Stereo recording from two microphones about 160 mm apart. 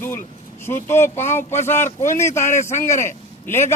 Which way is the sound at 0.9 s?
15° left (ahead or behind).